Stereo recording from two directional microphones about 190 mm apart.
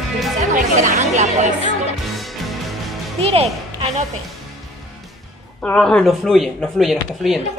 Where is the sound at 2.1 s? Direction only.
Centre (ahead or behind).